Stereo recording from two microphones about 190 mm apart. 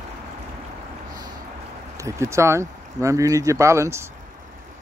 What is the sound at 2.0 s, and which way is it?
Speech, 15° right (ahead or behind).